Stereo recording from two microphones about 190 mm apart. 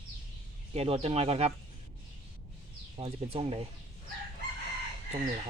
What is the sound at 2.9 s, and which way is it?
Speech, 30° right (ahead or behind).